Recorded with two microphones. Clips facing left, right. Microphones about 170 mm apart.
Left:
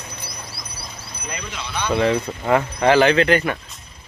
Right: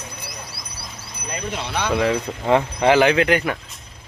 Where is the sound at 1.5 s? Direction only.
60° right (ahead or behind).